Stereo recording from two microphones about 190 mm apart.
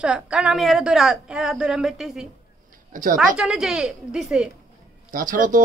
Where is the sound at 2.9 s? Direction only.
45° right (ahead or behind).